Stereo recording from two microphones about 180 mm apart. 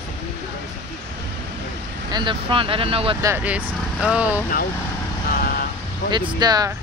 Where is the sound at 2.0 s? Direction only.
25° right (ahead or behind).